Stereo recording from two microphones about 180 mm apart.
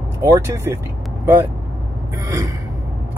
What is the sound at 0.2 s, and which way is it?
Speech, 15° right (ahead or behind).